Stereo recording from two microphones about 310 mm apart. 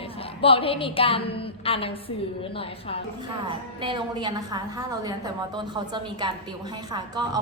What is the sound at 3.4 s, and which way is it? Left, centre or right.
A woman's voice, centre.